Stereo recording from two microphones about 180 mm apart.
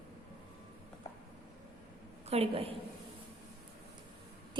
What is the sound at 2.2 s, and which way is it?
Speech, 35° right (ahead or behind).